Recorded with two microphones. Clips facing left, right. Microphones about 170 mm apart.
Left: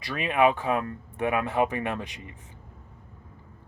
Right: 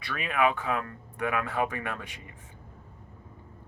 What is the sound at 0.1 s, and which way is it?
Speech, 25° left (ahead or behind).